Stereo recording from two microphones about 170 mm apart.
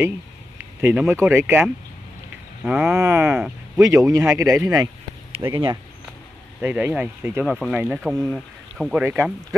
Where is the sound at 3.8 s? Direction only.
20° right (ahead or behind).